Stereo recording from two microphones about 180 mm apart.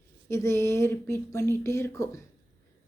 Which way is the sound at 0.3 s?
15° left (ahead or behind).